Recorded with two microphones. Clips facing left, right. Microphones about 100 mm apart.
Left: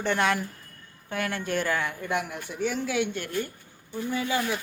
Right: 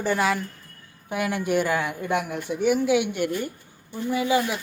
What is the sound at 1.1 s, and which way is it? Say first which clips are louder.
Speech: right 5 dB; 15° right (ahead or behind).